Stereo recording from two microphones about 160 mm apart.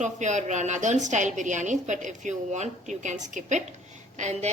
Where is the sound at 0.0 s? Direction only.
50° right (ahead or behind).